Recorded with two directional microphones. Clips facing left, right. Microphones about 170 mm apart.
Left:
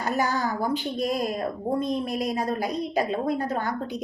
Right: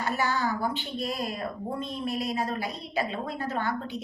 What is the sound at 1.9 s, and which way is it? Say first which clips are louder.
A woman's voice: left 4 dB; 40° left (ahead or behind).